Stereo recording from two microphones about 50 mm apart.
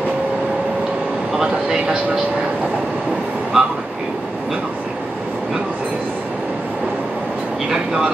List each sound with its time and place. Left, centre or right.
1.4 s speech: centre
3.5 s train: centre
7.7 s speech: centre